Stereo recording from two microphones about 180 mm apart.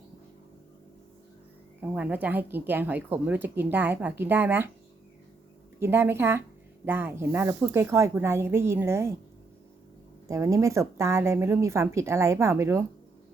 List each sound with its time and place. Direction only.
1.8 s a woman's voice: 10° right (ahead or behind)
5.8 s a woman's voice: 15° right (ahead or behind)
10.2 s a woman's voice: 15° right (ahead or behind)